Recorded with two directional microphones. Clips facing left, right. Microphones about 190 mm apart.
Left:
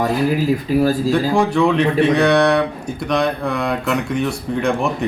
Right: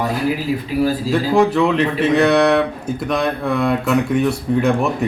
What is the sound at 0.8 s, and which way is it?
Speech, 45° left (ahead or behind).